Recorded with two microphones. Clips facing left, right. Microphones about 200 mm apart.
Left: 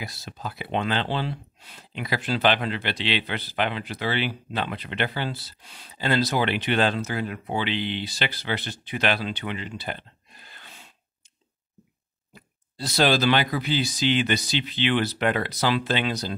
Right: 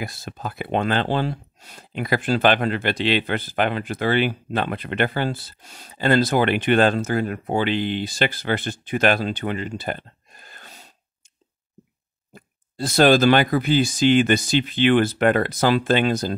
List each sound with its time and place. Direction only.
0.0 s speech: 50° right (ahead or behind)
12.3 s speech: 50° right (ahead or behind)